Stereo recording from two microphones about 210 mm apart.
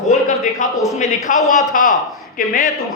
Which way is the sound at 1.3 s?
40° left (ahead or behind).